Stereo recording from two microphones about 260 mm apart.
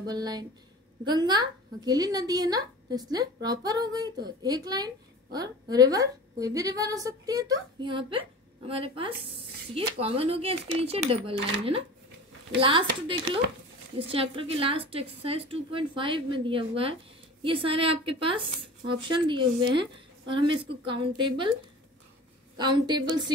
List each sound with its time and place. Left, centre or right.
0.0 s a woman's voice: centre
12.5 s a woman's voice: centre
22.6 s a woman's voice: centre